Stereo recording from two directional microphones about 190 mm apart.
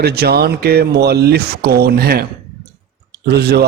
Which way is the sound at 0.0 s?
55° right (ahead or behind).